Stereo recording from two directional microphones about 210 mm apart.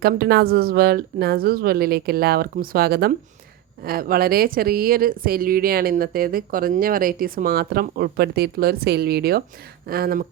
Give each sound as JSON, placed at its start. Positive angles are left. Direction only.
{"t": 0.0, "sound": "speech", "side_deg": -50}